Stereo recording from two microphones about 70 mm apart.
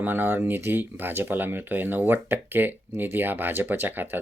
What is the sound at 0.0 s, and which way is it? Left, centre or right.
Speech, right.